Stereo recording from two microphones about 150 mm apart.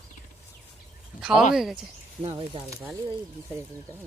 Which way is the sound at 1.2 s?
5° right (ahead or behind).